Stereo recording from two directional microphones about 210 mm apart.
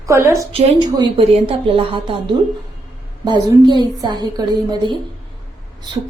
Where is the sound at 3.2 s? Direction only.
20° right (ahead or behind).